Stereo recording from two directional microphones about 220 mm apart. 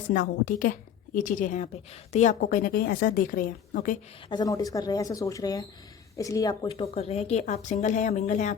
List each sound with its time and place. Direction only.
0.1 s a woman's voice: 40° left (ahead or behind)
4.3 s a woman's voice: 15° left (ahead or behind); by 8.5 s 35° left (ahead or behind)